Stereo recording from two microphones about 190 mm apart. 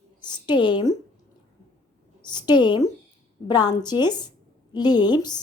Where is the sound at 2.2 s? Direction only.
20° left (ahead or behind).